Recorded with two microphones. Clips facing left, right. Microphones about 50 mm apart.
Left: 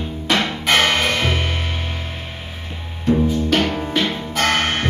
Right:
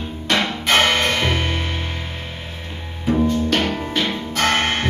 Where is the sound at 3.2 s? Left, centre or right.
Centre.